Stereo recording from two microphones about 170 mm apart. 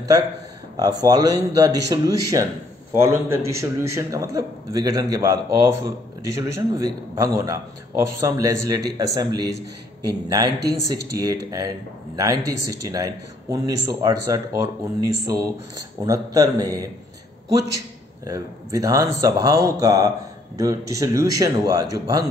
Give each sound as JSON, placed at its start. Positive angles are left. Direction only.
{"t": 0.7, "sound": "a man's voice", "side_deg": -20}